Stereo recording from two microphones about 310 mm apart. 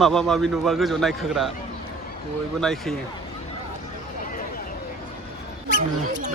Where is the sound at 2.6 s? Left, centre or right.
Centre.